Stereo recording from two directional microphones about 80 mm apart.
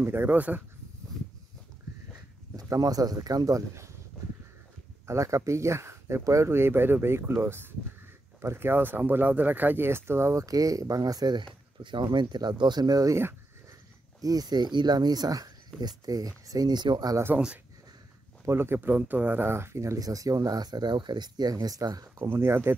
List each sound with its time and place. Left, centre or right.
0.0 s speech: right
2.5 s speech: right
5.0 s speech: right
10.4 s speech: right
14.2 s speech: right
17.3 s speech: right
18.8 s speech: right
20.0 s speech: right
22.3 s speech: right